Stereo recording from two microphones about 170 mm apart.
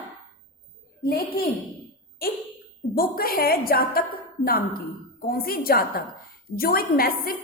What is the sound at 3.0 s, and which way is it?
A woman's voice, 60° left (ahead or behind).